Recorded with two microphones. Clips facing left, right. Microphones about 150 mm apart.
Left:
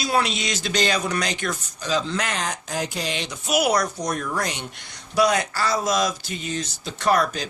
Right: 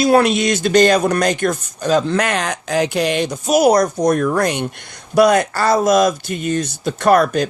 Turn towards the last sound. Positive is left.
turn(degrees=-55)  # may be behind; listen again after turning